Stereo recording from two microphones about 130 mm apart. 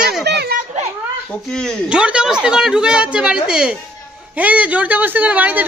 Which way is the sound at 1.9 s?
10° right (ahead or behind).